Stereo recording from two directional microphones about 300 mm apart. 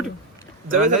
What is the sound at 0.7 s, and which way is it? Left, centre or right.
Speech, right.